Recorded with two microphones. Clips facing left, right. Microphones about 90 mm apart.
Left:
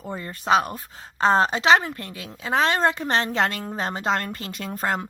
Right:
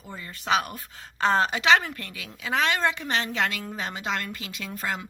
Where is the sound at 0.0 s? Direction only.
40° left (ahead or behind).